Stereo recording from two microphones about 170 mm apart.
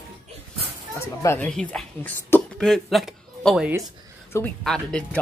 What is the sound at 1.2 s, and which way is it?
Speech, 15° left (ahead or behind).